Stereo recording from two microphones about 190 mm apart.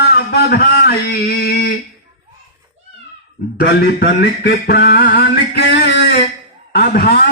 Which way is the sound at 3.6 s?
60° left (ahead or behind).